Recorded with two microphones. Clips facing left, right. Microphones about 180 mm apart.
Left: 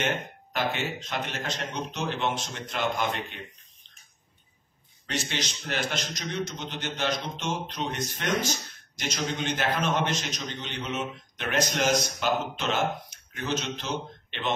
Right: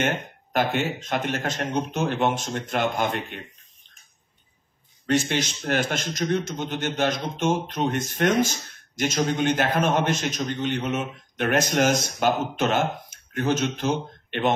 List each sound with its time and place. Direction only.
0.0 s a man's voice: 50° right (ahead or behind)
5.0 s a man's voice: 50° right (ahead or behind)